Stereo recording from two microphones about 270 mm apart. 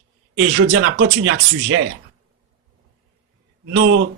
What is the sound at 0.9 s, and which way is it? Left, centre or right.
Speech, right.